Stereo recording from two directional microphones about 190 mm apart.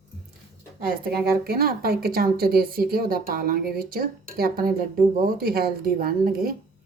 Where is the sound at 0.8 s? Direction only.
50° right (ahead or behind).